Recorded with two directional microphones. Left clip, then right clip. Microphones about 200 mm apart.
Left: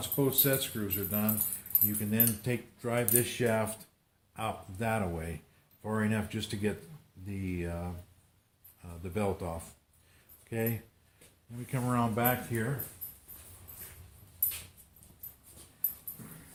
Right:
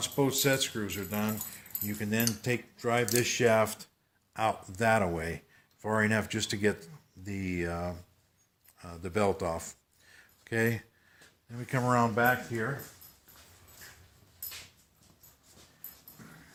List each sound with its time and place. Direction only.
0.0 s speech: 40° right (ahead or behind)
12.1 s speech: 20° right (ahead or behind)